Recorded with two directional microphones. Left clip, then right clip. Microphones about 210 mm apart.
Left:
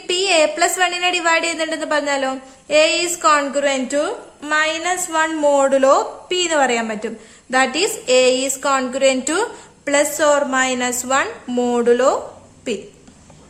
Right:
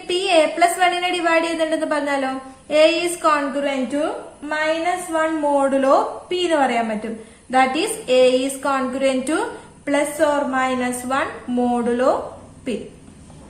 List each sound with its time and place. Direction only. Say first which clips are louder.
0.1 s a woman's voice: left 1 dB; 35° left (ahead or behind)